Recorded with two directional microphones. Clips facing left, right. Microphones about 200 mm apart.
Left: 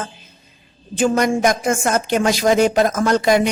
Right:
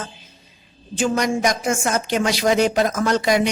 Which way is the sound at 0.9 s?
55° left (ahead or behind).